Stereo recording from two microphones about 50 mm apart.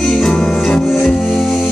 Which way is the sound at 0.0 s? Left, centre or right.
Centre.